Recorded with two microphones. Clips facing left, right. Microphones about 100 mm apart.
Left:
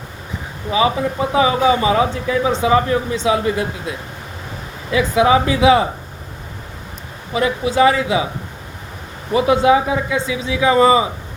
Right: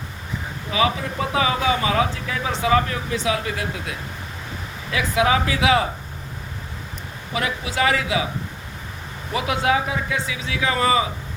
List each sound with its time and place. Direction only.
0.7 s speech: 25° left (ahead or behind)
7.3 s speech: 25° left (ahead or behind)
9.3 s speech: 25° left (ahead or behind)